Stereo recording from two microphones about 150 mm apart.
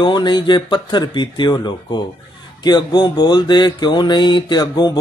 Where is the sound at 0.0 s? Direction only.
30° left (ahead or behind).